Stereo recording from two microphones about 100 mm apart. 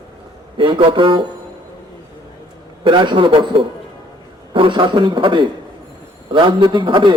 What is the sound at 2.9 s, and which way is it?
A man's voice, 55° right (ahead or behind).